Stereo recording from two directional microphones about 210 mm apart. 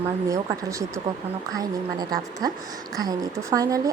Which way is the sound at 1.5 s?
15° right (ahead or behind).